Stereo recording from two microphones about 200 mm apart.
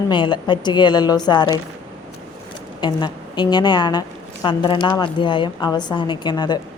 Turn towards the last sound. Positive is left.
turn(degrees=20)  # may be behind; listen again after turning